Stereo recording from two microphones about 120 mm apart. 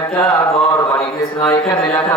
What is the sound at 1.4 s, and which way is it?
Speech, 15° left (ahead or behind).